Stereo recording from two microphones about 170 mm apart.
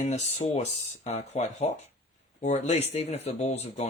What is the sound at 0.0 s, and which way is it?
Speech, 45° left (ahead or behind).